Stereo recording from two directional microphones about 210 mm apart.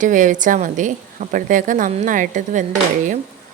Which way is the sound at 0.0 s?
40° right (ahead or behind).